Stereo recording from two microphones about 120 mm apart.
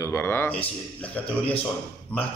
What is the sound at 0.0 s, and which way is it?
Speech, 20° left (ahead or behind).